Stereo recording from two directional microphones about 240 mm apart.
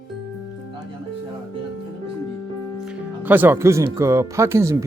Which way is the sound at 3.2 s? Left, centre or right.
Centre.